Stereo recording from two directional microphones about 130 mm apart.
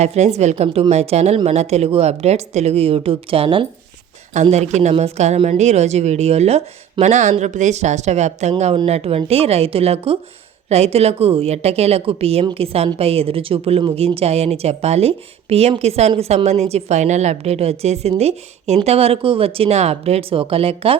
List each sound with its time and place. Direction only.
0.0 s speech: 55° right (ahead or behind)
4.4 s speech: 60° right (ahead or behind)